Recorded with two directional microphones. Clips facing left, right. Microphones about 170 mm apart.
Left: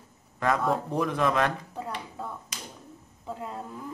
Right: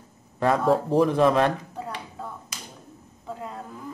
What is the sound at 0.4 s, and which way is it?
Speech, 30° right (ahead or behind).